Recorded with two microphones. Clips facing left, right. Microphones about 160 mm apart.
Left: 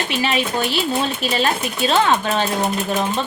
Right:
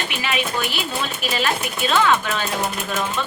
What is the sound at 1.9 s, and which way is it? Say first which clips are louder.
Speech: left 1 dB; 30° left (ahead or behind).